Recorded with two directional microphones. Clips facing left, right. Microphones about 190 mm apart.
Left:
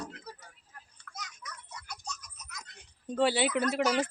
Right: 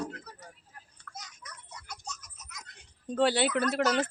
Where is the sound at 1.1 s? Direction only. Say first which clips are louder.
Right 1 dB; 5° left (ahead or behind).